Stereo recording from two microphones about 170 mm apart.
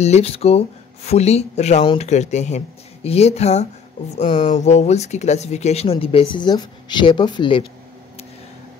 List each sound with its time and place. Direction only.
0.0 s speech: 40° left (ahead or behind)